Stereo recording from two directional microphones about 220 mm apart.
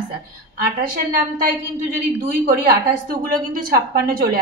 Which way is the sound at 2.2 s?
45° right (ahead or behind).